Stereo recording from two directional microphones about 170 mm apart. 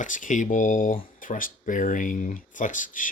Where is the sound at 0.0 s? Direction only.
50° left (ahead or behind).